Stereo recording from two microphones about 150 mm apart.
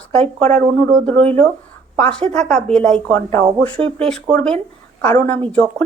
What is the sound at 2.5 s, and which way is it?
Speech, 5° left (ahead or behind).